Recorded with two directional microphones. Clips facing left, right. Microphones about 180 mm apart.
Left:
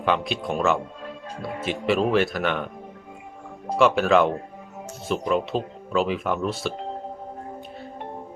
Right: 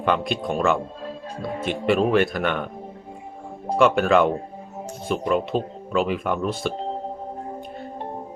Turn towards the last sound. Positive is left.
turn(degrees=0)  # may be behind; listen again after turning